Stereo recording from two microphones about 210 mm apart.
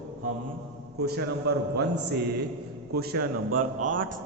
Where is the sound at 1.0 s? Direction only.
50° right (ahead or behind).